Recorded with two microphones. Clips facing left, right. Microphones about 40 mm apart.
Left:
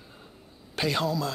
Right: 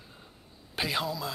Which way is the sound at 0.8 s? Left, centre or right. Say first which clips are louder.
Left 4 dB; centre.